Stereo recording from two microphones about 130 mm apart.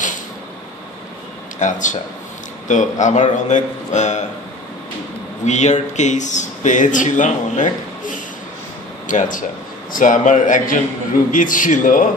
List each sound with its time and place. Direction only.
1.6 s speech: 70° left (ahead or behind)
5.4 s speech: 60° left (ahead or behind)
9.0 s a man's voice: 85° left